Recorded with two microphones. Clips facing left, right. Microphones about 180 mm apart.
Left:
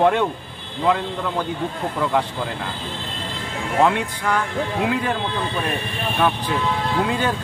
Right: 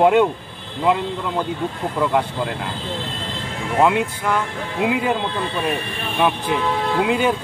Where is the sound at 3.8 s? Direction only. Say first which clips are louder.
Right 2 dB; 10° right (ahead or behind).